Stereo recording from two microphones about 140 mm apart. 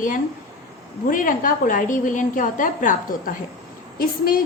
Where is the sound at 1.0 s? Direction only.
75° left (ahead or behind).